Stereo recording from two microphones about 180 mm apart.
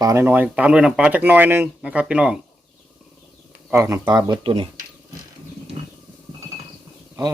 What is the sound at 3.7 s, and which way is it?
Speech, 15° right (ahead or behind).